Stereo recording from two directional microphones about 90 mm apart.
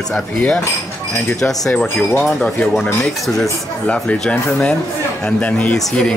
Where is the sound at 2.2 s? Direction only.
5° left (ahead or behind).